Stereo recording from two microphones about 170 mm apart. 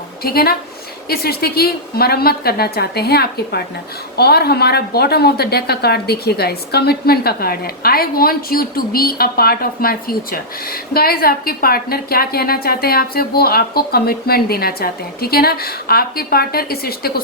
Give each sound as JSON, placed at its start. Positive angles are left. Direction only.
{"t": 0.2, "sound": "a woman's voice", "side_deg": 65}